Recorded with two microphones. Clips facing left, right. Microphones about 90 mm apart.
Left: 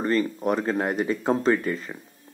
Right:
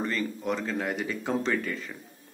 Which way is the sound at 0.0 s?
40° left (ahead or behind).